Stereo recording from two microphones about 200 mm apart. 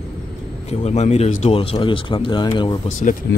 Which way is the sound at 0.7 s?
35° left (ahead or behind).